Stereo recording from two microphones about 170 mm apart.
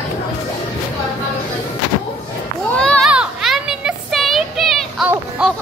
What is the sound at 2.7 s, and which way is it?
Children playing, 5° left (ahead or behind).